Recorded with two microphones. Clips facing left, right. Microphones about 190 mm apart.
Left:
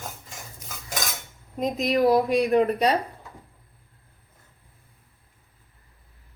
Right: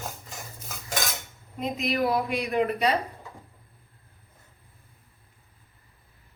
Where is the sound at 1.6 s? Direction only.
40° left (ahead or behind).